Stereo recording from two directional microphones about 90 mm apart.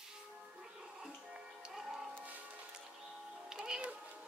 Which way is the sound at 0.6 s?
5° right (ahead or behind).